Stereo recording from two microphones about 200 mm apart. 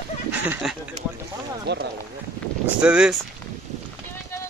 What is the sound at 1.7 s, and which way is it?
Speech, 60° right (ahead or behind).